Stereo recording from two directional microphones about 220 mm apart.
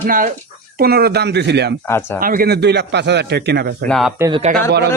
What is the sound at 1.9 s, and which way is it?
Speech, 10° left (ahead or behind).